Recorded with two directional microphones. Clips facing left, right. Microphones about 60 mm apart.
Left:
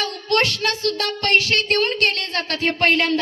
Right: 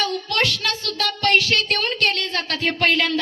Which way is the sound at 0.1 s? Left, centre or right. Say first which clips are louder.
Left 2 dB; left.